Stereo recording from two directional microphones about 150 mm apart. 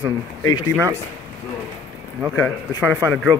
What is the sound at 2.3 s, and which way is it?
Speech, 10° left (ahead or behind).